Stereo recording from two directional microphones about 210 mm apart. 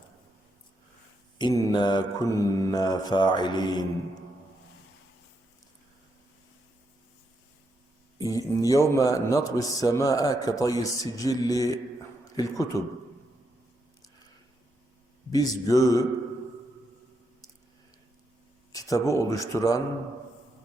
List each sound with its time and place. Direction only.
1.4 s mantra: 20° left (ahead or behind)
8.2 s a man's voice: 15° left (ahead or behind)
15.3 s a man's voice: 15° left (ahead or behind)
18.7 s speech: 15° left (ahead or behind)